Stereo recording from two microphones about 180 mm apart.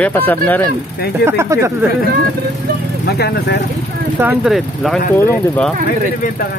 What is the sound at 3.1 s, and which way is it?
Speech, 65° left (ahead or behind).